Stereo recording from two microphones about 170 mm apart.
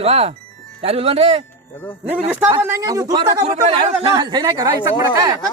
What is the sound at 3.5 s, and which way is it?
Speech, 40° right (ahead or behind).